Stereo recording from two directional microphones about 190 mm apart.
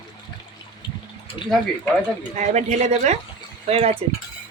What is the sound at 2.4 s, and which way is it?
A woman's voice, 35° right (ahead or behind).